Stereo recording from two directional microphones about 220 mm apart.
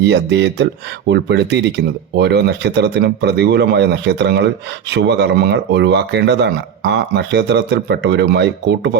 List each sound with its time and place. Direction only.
0.0 s speech: 50° right (ahead or behind)